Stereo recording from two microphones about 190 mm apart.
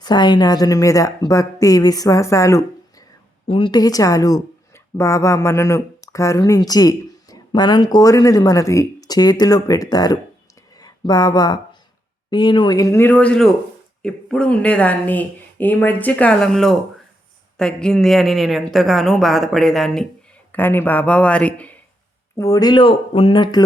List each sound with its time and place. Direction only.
0.0 s speech: 25° left (ahead or behind)
3.4 s speech: 25° left (ahead or behind)
10.8 s a sound: 20° left (ahead or behind)
12.3 s a woman's voice: 25° left (ahead or behind); by 21.8 s 5° left (ahead or behind)
22.4 s speech: 20° left (ahead or behind)